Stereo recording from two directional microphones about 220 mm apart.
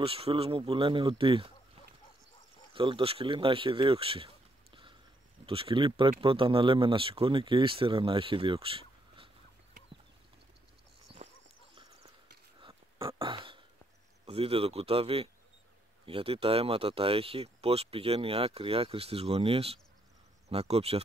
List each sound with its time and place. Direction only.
0.0 s speech: 25° right (ahead or behind)
2.7 s speech: 25° right (ahead or behind)
5.4 s speech: 25° right (ahead or behind)
11.1 s clip-clop: 25° right (ahead or behind)
12.5 s a sound: 25° right (ahead or behind)
14.2 s speech: 25° right (ahead or behind)